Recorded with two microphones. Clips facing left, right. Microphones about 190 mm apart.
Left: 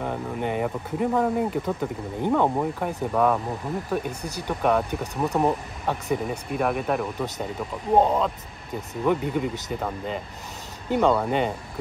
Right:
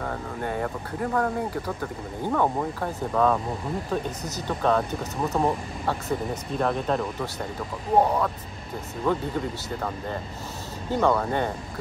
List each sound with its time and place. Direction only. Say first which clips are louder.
0.0 s speech: left 3 dB; 15° left (ahead or behind)